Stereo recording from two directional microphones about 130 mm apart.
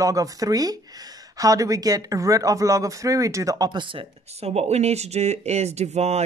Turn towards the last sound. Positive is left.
turn(degrees=-55)  # may be behind; listen again after turning